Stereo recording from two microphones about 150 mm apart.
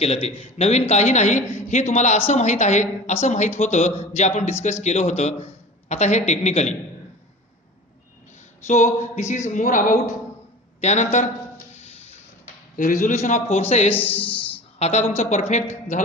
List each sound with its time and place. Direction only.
0.0 s a woman's voice: 45° left (ahead or behind)
8.6 s a woman's voice: 55° left (ahead or behind)
11.7 s a sound: 45° left (ahead or behind)
12.7 s a woman's voice: 60° left (ahead or behind)
13.9 s speech: 10° left (ahead or behind)
14.8 s a woman's voice: 45° left (ahead or behind)